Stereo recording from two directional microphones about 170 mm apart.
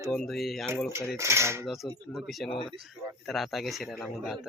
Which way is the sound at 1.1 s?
15° right (ahead or behind).